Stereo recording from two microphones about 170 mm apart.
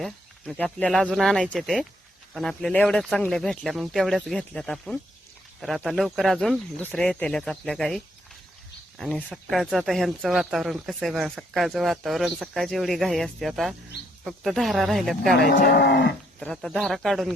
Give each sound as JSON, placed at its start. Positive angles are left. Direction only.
{"t": 0.0, "sound": "speech", "side_deg": 0}
{"t": 15.4, "sound": "speech", "side_deg": 65}
{"t": 16.4, "sound": "speech", "side_deg": 0}